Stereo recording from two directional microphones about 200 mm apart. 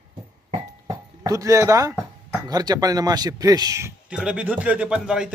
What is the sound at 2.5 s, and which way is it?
A man's voice, 20° right (ahead or behind).